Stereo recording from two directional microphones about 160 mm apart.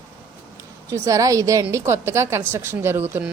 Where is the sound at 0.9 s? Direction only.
20° right (ahead or behind).